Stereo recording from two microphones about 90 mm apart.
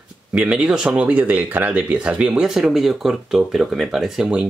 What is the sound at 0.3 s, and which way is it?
Speech, 10° right (ahead or behind).